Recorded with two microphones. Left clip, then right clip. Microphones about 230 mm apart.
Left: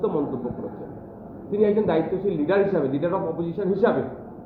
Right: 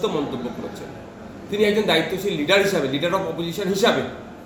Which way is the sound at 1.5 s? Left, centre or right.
Centre.